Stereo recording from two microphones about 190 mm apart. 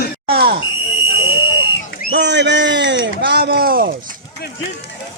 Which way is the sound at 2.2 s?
65° right (ahead or behind).